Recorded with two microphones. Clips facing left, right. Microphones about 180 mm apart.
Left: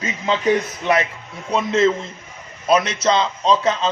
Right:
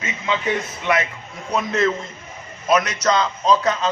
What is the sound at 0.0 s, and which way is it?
A man's voice, 35° left (ahead or behind).